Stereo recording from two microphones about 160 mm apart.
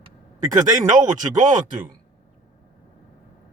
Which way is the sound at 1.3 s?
55° right (ahead or behind).